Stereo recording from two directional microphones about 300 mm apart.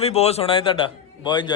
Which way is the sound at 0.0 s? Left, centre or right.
Left.